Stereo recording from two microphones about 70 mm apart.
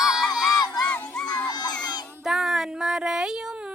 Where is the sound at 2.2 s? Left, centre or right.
Centre.